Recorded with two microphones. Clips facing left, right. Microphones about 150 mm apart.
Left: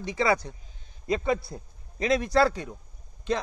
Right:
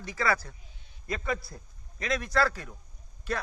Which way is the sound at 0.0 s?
20° left (ahead or behind).